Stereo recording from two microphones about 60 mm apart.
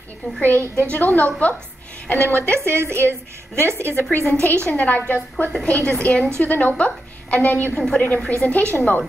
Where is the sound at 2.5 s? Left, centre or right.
Right.